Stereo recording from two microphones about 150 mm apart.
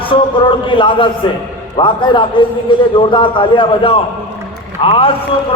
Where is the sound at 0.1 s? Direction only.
35° left (ahead or behind).